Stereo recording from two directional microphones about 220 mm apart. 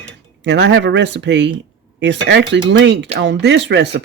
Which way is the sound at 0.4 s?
50° right (ahead or behind).